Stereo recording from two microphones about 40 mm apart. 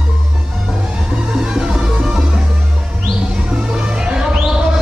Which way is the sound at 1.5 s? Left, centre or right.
Centre.